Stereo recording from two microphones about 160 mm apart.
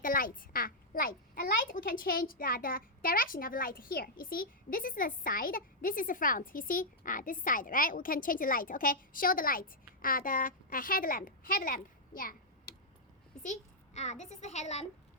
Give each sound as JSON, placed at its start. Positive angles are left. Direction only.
{"t": 0.0, "sound": "a child's voice", "side_deg": 60}
{"t": 13.4, "sound": "a child's voice", "side_deg": 45}